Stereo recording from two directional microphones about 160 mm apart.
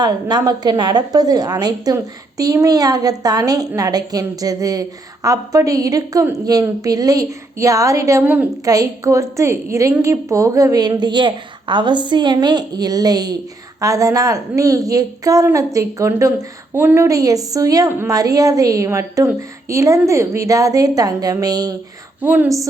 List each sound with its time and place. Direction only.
0.0 s a woman's voice: 25° right (ahead or behind)
8.6 s a woman's voice: 20° right (ahead or behind)
22.2 s a woman's voice: 10° right (ahead or behind)